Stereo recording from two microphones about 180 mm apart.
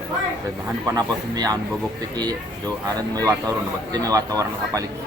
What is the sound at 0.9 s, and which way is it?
Speech, 20° right (ahead or behind).